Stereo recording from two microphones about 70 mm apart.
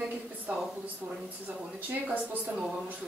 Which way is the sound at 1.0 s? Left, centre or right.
Right.